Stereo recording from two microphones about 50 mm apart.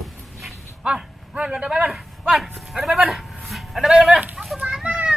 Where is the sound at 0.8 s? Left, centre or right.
Centre.